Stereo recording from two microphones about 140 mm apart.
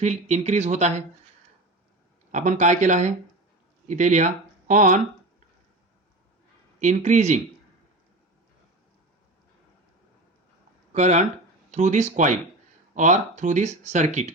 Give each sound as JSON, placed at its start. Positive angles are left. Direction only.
{"t": 0.0, "sound": "speech", "side_deg": -55}
{"t": 2.3, "sound": "speech", "side_deg": -60}
{"t": 6.7, "sound": "speech", "side_deg": -60}
{"t": 10.9, "sound": "speech", "side_deg": -55}